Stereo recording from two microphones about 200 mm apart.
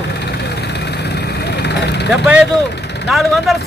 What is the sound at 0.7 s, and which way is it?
Vehicle, 55° left (ahead or behind).